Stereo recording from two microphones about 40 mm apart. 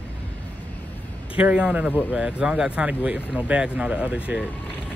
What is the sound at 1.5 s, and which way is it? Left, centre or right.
Speech, right.